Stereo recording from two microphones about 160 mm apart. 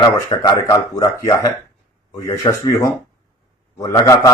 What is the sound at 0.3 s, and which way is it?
A man's voice, 25° left (ahead or behind).